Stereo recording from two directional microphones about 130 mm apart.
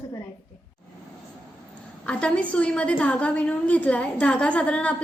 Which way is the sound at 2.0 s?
10° left (ahead or behind).